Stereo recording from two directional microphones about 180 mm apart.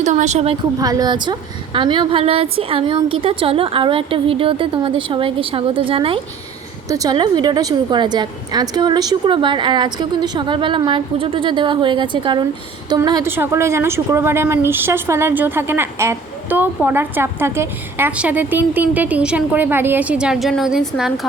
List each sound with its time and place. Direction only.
0.0 s a woman's voice: 40° right (ahead or behind)
0.8 s a woman's voice: 20° right (ahead or behind); by 21.2 s centre (ahead or behind)